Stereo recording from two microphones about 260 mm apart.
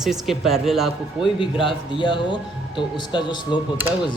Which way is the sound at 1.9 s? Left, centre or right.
Centre.